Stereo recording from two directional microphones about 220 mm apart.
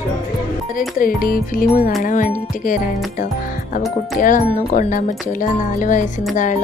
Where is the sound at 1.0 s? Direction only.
40° left (ahead or behind).